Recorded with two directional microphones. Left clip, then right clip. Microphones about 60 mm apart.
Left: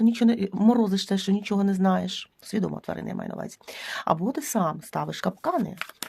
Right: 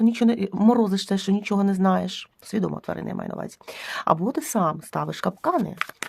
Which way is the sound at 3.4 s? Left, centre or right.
Right.